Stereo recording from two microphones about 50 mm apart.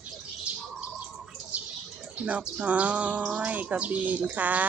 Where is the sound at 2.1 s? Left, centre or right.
Right.